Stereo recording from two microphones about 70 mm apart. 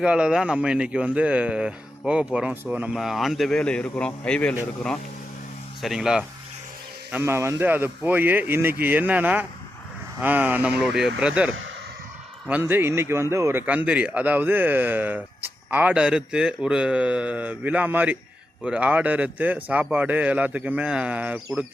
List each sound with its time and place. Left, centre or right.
0.0 s speech: centre
2.9 s speech: centre
3.6 s a man's voice: centre
5.8 s speech: centre
7.2 s a man's voice: right; by 10.8 s centre
10.8 s speech: centre
12.5 s a man's voice: right
13.7 s speech: centre